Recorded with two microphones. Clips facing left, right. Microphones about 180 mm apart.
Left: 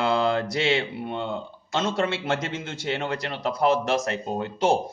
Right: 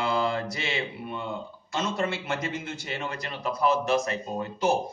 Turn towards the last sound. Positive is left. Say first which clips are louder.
# left 3 dB
turn(degrees=90)